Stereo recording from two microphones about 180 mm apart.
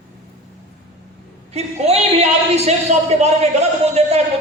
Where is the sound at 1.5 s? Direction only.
35° right (ahead or behind).